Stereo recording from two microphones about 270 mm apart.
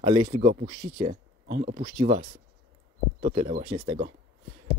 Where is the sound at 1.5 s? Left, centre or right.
Right.